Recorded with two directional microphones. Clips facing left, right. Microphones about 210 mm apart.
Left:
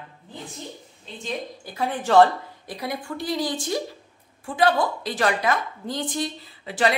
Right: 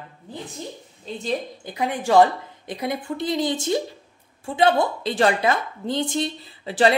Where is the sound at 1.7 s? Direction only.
15° right (ahead or behind).